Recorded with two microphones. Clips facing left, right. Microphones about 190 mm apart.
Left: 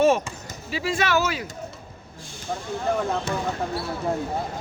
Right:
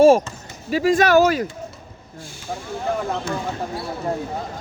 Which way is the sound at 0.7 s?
45° right (ahead or behind).